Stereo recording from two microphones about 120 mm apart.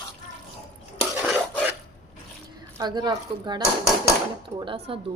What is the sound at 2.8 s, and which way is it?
Speech, 35° right (ahead or behind).